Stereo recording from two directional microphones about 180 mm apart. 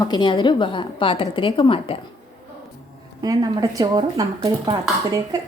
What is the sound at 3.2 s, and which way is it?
Speech, 20° right (ahead or behind).